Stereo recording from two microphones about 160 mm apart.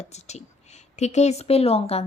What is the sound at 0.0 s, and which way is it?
A woman's voice, 45° left (ahead or behind).